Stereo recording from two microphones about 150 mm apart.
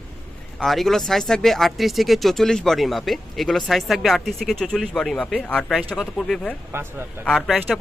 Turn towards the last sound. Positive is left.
turn(degrees=0)  # may be behind; listen again after turning